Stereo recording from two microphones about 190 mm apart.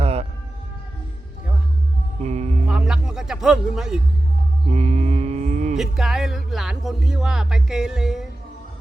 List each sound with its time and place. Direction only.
0.0 s music: 30° right (ahead or behind)
2.2 s music: 35° right (ahead or behind)
2.6 s music: 5° right (ahead or behind)
4.7 s mantra: 35° right (ahead or behind)
5.7 s speech: centre (ahead or behind)